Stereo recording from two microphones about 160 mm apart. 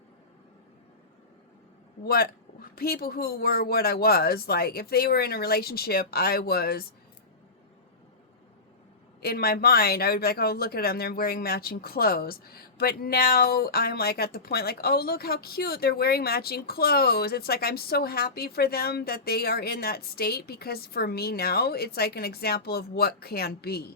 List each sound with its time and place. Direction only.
2.0 s speech: 70° left (ahead or behind)
9.2 s speech: 75° left (ahead or behind)